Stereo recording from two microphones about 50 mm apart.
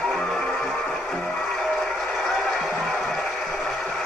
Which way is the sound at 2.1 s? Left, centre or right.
Centre.